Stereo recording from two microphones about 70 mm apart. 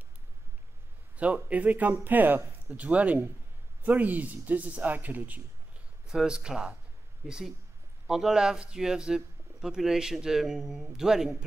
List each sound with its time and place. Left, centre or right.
1.1 s speech: right
6.0 s speech: centre